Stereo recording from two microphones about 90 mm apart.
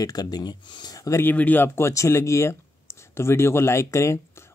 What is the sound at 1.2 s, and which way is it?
Speech, 20° left (ahead or behind).